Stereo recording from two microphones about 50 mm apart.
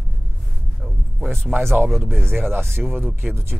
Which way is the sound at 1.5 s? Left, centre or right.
Right.